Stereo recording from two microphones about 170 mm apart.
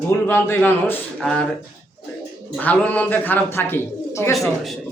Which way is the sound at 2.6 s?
10° left (ahead or behind).